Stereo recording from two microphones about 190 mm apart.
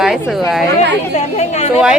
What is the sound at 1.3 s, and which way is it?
Speech, 35° left (ahead or behind).